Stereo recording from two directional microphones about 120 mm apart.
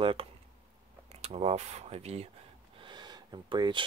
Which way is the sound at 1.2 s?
60° right (ahead or behind).